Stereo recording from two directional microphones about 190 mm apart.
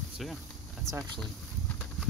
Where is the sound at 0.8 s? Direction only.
15° right (ahead or behind).